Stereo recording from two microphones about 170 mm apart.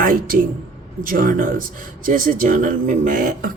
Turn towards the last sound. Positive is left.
turn(degrees=-50)  # may be behind; listen again after turning